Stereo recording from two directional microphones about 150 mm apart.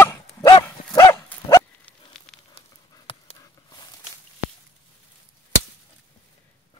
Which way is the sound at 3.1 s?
40° left (ahead or behind).